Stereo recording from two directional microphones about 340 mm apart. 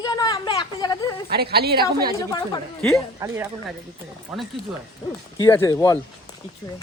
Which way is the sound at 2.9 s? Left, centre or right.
Centre.